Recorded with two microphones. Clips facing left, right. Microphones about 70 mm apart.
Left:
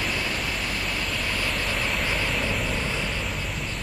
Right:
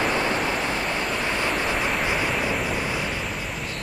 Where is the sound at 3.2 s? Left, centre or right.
Centre.